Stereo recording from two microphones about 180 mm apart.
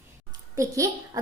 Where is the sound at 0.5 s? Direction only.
15° right (ahead or behind).